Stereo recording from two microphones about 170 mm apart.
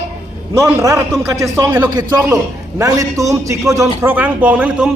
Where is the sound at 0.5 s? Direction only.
15° right (ahead or behind).